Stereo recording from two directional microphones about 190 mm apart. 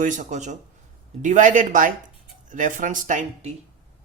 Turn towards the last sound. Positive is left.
turn(degrees=-35)  # may be behind; listen again after turning